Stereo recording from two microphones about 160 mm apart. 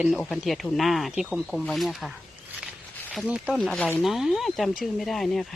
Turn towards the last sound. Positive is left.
turn(degrees=0)  # may be behind; listen again after turning